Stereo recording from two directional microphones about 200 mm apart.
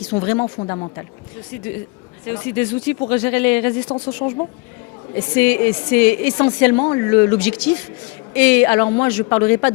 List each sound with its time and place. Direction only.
0.1 s a woman's voice: 15° left (ahead or behind)
2.2 s a woman's voice: 10° left (ahead or behind)
4.2 s speech: 25° left (ahead or behind)
5.1 s a woman's voice: 10° left (ahead or behind)